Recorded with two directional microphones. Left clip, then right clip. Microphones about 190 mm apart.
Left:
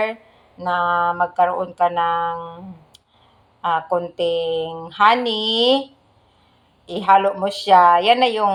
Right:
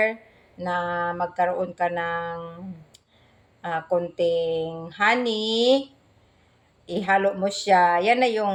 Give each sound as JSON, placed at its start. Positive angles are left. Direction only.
{"t": 0.0, "sound": "a woman's voice", "side_deg": -15}
{"t": 3.6, "sound": "a woman's voice", "side_deg": -15}
{"t": 6.8, "sound": "a woman's voice", "side_deg": -15}